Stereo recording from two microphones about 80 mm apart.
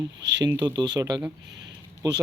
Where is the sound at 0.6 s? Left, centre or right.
Right.